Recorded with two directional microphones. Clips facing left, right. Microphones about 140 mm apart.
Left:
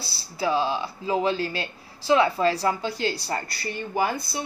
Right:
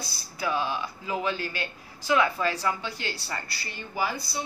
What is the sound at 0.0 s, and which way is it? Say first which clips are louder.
Speech: left 5 dB; 30° left (ahead or behind).